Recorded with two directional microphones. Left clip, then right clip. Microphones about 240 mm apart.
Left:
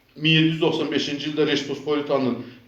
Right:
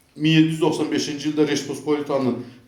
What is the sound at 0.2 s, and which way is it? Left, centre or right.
A man's voice, right.